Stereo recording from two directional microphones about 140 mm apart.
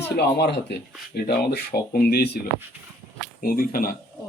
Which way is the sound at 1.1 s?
90° left.